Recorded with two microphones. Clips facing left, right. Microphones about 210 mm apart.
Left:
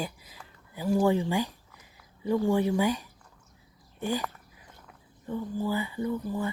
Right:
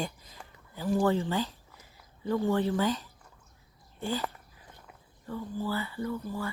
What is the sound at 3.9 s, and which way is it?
Speech, 15° left (ahead or behind).